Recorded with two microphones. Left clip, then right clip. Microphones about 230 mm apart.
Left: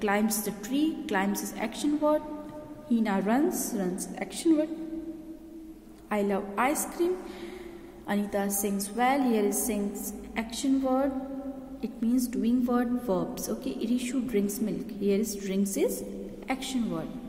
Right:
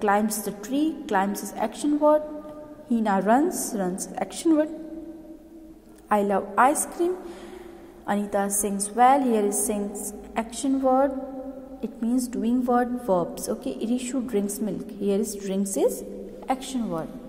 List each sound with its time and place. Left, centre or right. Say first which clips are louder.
0.0 s a woman's voice: right 5 dB; centre
6.0 s a woman's voice: right 6 dB; centre
8.1 s a woman's voice: right 5 dB; centre